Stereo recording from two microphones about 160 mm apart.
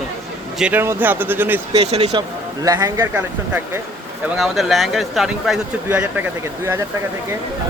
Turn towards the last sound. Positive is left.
turn(degrees=-15)  # may be behind; listen again after turning